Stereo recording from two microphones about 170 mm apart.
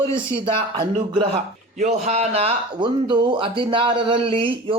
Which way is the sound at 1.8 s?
40° right (ahead or behind).